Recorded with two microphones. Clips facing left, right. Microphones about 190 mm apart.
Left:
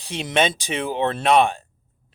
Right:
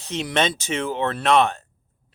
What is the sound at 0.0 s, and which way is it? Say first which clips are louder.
Speech: left 1 dB; 15° left (ahead or behind).